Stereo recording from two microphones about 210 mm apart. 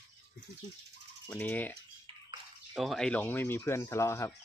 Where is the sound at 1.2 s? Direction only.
10° left (ahead or behind).